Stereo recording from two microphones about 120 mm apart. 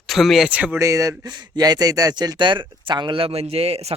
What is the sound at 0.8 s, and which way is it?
Speech, 25° right (ahead or behind).